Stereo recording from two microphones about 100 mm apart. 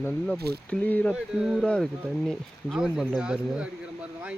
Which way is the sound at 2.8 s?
5° right (ahead or behind).